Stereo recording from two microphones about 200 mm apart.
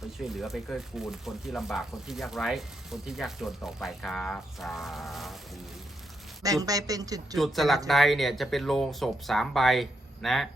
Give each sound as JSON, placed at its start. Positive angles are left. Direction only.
{"t": 0.2, "sound": "speech", "side_deg": 0}
{"t": 6.4, "sound": "speech", "side_deg": -15}
{"t": 7.3, "sound": "speech", "side_deg": 0}